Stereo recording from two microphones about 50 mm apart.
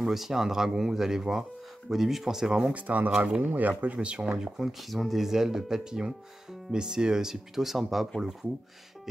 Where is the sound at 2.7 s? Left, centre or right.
Right.